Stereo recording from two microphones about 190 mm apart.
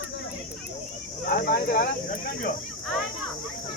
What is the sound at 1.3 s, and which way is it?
Speech, 50° left (ahead or behind).